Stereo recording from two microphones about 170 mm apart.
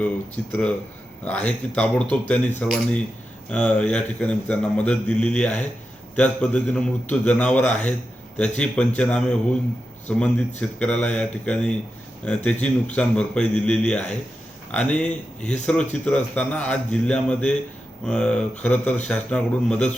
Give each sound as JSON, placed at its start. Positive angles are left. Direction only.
{"t": 1.2, "sound": "a man's voice", "side_deg": 10}